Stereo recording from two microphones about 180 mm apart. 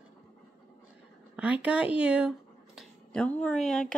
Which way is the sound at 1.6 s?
5° right (ahead or behind).